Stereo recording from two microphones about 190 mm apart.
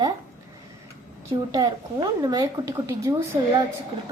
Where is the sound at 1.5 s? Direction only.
20° right (ahead or behind).